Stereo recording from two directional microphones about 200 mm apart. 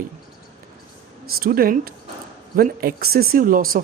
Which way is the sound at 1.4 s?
45° right (ahead or behind).